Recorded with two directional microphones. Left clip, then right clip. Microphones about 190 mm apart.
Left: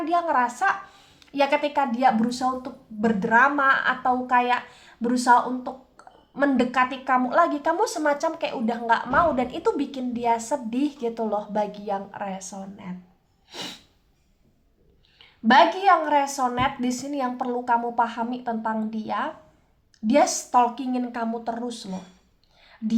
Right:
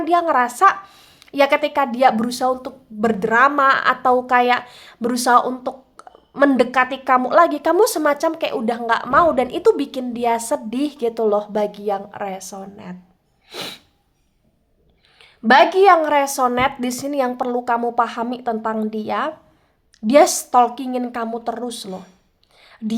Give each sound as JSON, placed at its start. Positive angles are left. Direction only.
{"t": 0.0, "sound": "a woman's voice", "side_deg": -40}
{"t": 15.2, "sound": "a woman's voice", "side_deg": -45}
{"t": 22.5, "sound": "a sound", "side_deg": -40}